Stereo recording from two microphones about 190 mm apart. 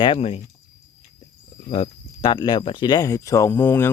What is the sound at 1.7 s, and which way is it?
Speech, 25° left (ahead or behind).